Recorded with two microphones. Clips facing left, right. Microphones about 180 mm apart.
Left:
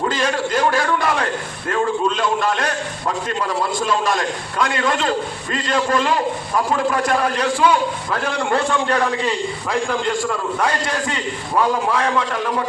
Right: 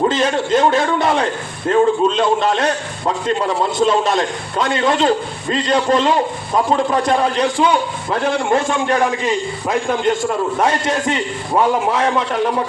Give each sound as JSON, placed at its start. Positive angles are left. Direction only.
{"t": 0.0, "sound": "a man's voice", "side_deg": -25}